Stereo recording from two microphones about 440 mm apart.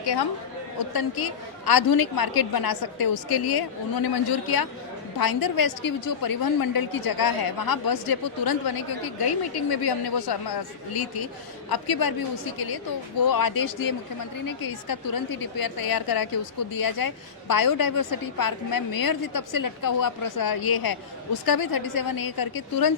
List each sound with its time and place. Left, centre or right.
0.9 s a woman's voice: left
13.3 s a woman's voice: left